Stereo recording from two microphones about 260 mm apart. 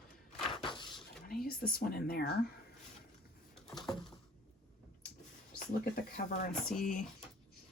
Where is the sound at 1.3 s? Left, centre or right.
Left.